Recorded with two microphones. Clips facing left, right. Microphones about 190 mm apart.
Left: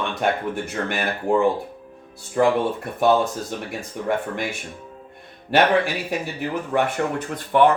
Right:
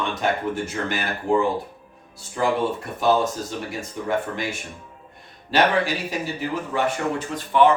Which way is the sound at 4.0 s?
60° left (ahead or behind).